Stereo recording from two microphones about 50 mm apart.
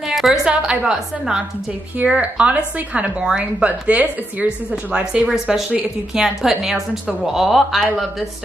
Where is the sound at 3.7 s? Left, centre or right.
Right.